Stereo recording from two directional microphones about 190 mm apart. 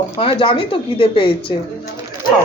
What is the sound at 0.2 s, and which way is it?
Speech, 25° left (ahead or behind).